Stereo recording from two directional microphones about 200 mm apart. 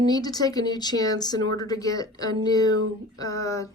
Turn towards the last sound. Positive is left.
turn(degrees=15)  # may be behind; listen again after turning